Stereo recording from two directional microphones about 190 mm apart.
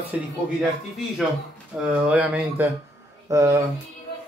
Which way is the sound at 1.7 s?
5° right (ahead or behind).